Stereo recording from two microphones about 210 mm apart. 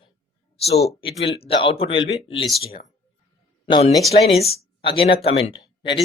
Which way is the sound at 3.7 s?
25° left (ahead or behind).